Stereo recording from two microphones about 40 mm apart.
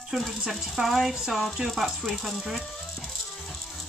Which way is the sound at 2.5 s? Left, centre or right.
Centre.